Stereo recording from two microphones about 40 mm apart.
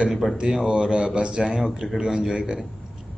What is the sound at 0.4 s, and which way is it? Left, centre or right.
Speech, centre.